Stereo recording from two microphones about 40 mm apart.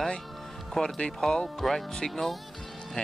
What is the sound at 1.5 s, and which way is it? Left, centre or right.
Speech, centre.